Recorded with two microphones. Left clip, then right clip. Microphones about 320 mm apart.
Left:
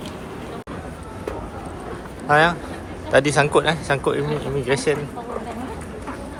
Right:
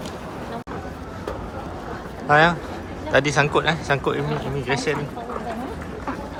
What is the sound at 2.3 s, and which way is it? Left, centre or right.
Speech, centre.